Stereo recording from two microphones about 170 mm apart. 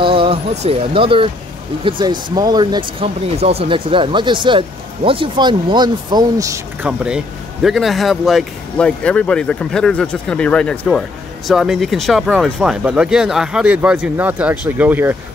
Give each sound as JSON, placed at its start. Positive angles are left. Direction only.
{"t": 0.0, "sound": "speech", "side_deg": -30}